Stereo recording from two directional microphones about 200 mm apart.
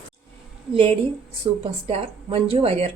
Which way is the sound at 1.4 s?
25° right (ahead or behind).